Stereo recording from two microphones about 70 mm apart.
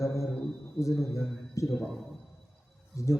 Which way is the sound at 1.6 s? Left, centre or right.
Left.